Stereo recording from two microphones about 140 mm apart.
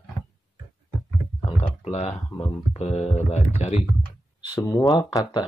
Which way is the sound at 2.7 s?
50° left (ahead or behind).